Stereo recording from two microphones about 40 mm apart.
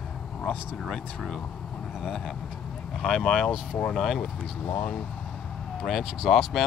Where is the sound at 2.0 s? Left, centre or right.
Centre.